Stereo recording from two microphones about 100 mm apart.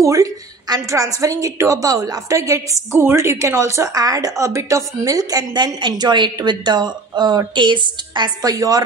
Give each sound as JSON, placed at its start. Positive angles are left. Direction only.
{"t": 0.0, "sound": "a woman's voice", "side_deg": -35}